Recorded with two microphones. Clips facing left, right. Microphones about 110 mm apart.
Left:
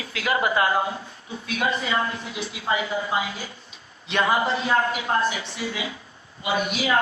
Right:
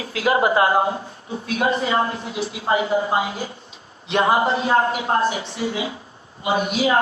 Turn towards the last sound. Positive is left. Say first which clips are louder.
# right 4 dB
turn(degrees=-30)  # may be behind; listen again after turning